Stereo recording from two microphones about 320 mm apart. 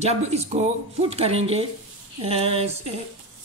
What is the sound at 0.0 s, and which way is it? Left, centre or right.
Speech, centre.